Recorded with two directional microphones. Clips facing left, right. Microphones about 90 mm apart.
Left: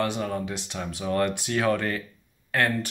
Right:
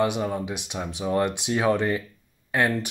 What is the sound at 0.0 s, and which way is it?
Speech, 15° right (ahead or behind).